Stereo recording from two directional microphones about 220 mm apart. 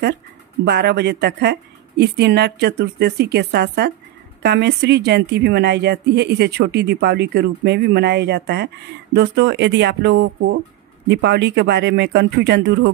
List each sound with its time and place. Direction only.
0.7 s a woman's voice: 50° right (ahead or behind)